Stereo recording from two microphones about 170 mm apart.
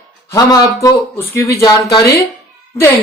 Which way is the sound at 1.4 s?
20° left (ahead or behind).